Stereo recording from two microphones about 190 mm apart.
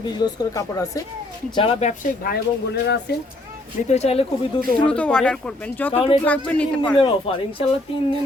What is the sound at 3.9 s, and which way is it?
Speech, 35° left (ahead or behind).